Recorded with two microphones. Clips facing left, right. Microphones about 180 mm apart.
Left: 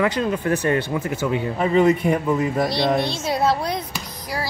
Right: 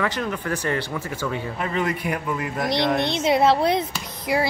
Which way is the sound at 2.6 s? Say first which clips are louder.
Left 1 dB; 20° right (ahead or behind).